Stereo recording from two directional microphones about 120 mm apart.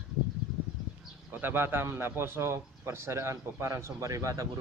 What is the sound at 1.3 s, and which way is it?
A man's voice, 15° right (ahead or behind).